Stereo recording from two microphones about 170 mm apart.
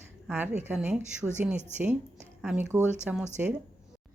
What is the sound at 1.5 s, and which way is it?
Speech, 45° right (ahead or behind).